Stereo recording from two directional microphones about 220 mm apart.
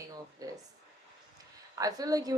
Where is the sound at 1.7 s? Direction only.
15° right (ahead or behind).